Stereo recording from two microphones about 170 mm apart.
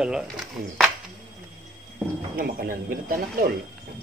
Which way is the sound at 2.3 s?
60° right (ahead or behind).